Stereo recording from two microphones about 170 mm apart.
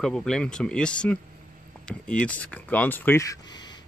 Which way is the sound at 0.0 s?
5° left (ahead or behind).